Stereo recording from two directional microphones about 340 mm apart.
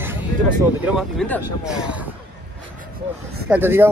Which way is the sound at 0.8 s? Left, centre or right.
Centre.